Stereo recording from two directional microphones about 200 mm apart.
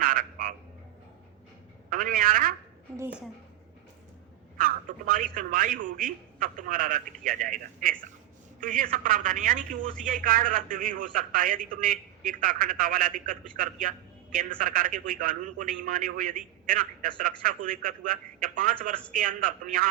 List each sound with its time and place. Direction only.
0.0 s frog: 45° right (ahead or behind)
1.9 s a man's voice: 45° right (ahead or behind)
4.5 s a man's voice: 45° right (ahead or behind)